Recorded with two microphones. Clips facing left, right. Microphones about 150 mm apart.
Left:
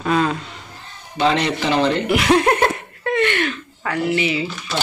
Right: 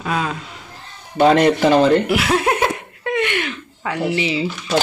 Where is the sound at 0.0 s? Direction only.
Centre (ahead or behind).